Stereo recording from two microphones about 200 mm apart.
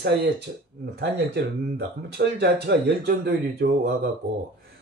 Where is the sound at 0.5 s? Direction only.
50° right (ahead or behind).